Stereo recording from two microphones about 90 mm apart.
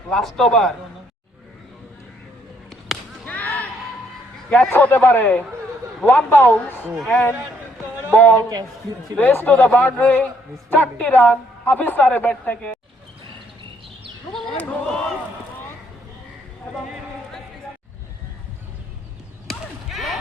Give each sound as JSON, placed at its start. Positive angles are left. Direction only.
{"t": 0.1, "sound": "a man's voice", "side_deg": 5}
{"t": 3.2, "sound": "a sound", "side_deg": 20}
{"t": 4.4, "sound": "a man's voice", "side_deg": 10}
{"t": 4.7, "sound": "a woman's voice", "side_deg": 25}
{"t": 8.1, "sound": "a woman's voice", "side_deg": 20}
{"t": 14.3, "sound": "a sound", "side_deg": 10}
{"t": 19.5, "sound": "chop", "side_deg": 0}